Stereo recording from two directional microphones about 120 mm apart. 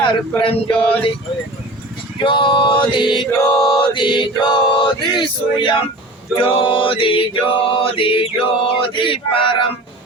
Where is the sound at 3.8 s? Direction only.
45° left (ahead or behind).